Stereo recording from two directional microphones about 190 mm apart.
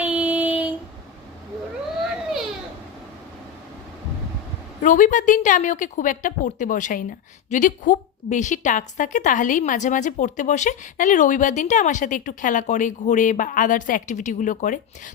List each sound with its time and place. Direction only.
0.0 s child singing: 10° right (ahead or behind)
4.8 s a woman's voice: 40° left (ahead or behind)